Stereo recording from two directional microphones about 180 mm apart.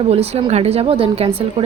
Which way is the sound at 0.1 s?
35° right (ahead or behind).